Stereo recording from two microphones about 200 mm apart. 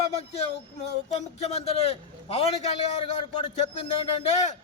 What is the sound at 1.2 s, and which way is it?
A man's voice, 30° left (ahead or behind).